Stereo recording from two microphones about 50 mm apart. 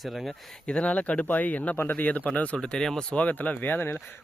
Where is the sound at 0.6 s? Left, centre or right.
Left.